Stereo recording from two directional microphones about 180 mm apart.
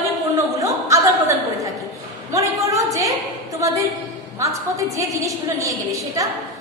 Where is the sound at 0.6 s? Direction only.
15° right (ahead or behind).